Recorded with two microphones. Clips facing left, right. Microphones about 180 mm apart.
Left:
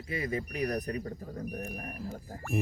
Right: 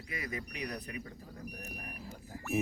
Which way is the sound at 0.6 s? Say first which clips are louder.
Left 9 dB; 45° left (ahead or behind).